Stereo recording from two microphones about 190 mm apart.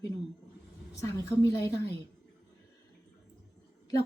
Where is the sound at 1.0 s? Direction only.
15° left (ahead or behind).